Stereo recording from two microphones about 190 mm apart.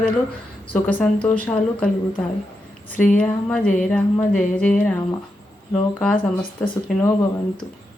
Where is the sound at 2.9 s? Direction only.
45° left (ahead or behind).